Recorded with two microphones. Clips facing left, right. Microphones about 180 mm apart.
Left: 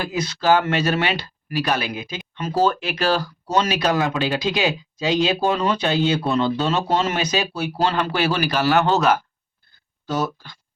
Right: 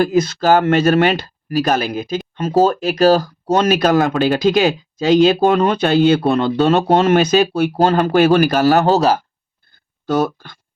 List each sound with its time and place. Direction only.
0.0 s speech: 50° right (ahead or behind)
10.1 s speech: 55° right (ahead or behind)